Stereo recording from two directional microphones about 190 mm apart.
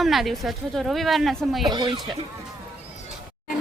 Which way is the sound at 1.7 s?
25° right (ahead or behind).